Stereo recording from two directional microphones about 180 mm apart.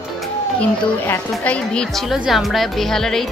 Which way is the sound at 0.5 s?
10° left (ahead or behind).